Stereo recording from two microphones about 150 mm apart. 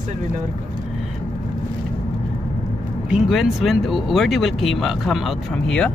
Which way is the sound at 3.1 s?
Centre (ahead or behind).